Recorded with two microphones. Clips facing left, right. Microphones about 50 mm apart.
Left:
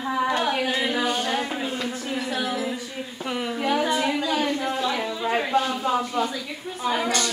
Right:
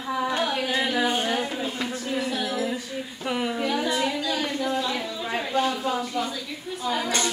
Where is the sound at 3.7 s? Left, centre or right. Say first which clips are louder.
Left 5 dB; left.